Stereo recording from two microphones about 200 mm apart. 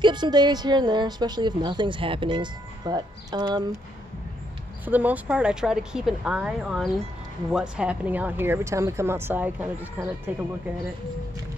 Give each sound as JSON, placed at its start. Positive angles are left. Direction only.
{"t": 0.0, "sound": "a woman's voice", "side_deg": -20}
{"t": 4.8, "sound": "speech", "side_deg": -10}